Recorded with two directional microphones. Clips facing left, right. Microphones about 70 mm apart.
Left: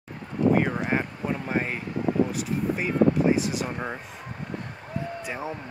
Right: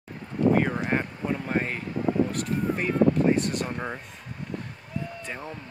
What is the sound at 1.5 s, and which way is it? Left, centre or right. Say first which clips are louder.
Speech: even; centre.